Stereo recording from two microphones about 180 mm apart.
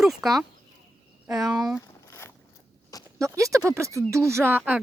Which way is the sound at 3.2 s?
20° right (ahead or behind).